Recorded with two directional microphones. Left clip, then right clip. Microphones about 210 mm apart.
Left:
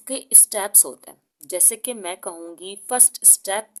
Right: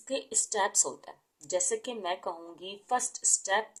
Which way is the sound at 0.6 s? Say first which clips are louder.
Left 3 dB; 40° left (ahead or behind).